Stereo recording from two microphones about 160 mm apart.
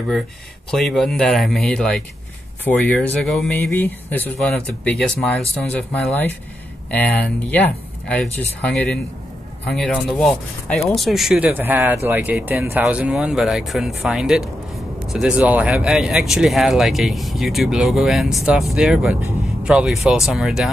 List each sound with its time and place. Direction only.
0.7 s speech: centre (ahead or behind)